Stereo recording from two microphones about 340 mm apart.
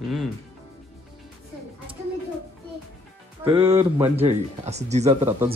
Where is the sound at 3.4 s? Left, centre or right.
Centre.